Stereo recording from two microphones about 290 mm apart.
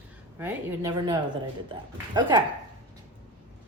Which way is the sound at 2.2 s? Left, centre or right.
Centre.